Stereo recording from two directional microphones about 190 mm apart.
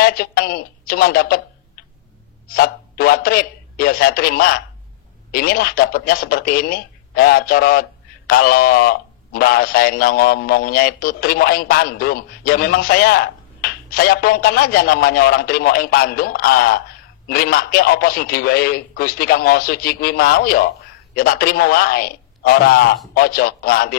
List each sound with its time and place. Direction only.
0.0 s speech: 50° left (ahead or behind)
2.4 s a man's voice: 50° left (ahead or behind)